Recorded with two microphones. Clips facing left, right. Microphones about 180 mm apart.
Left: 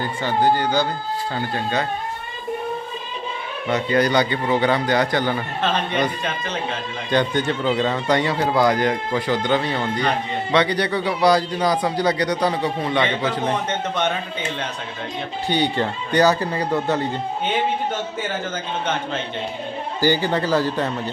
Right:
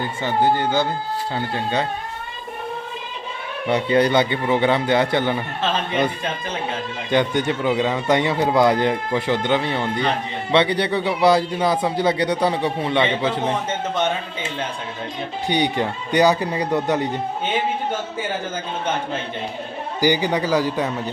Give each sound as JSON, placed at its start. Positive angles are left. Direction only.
{"t": 0.0, "sound": "speech", "side_deg": -20}
{"t": 3.7, "sound": "speech", "side_deg": -30}
{"t": 7.1, "sound": "speech", "side_deg": -15}
{"t": 13.4, "sound": "speech", "side_deg": -5}
{"t": 15.4, "sound": "speech", "side_deg": -15}
{"t": 20.0, "sound": "speech", "side_deg": -15}